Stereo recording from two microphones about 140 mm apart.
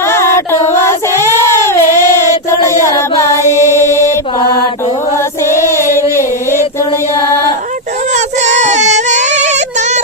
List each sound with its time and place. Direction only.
0.0 s child singing: 20° left (ahead or behind)
2.8 s mantra: 20° left (ahead or behind)
5.1 s child singing: 20° left (ahead or behind)
8.1 s child singing: 55° right (ahead or behind)